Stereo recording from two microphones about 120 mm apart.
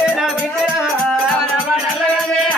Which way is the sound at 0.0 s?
5° right (ahead or behind).